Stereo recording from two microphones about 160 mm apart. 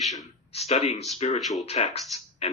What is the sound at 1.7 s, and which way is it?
Speech, 45° left (ahead or behind).